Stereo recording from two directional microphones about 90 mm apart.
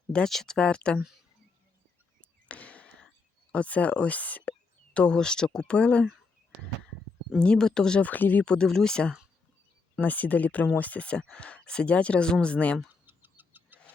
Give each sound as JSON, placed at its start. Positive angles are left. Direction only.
{"t": 0.1, "sound": "speech", "side_deg": 5}
{"t": 2.5, "sound": "a sound", "side_deg": 15}
{"t": 3.5, "sound": "speech", "side_deg": 15}
{"t": 7.3, "sound": "speech", "side_deg": 10}
{"t": 12.9, "sound": "bird", "side_deg": -20}